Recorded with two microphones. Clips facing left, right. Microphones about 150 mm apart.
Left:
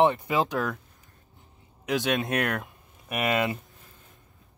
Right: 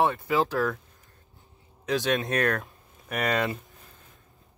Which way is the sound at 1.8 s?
15° left (ahead or behind).